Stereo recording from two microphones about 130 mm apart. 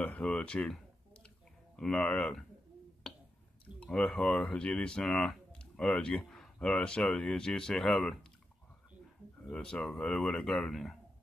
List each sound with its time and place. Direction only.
0.0 s a sound: 10° left (ahead or behind)
1.8 s speech: 10° left (ahead or behind)
3.1 s drip: 5° left (ahead or behind)
3.8 s speech: 10° left (ahead or behind)
9.5 s speech: 5° left (ahead or behind)